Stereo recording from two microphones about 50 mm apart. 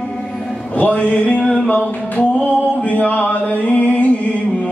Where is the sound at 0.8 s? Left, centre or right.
Left.